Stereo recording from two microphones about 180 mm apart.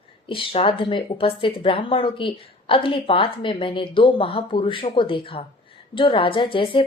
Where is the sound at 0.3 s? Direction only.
30° left (ahead or behind).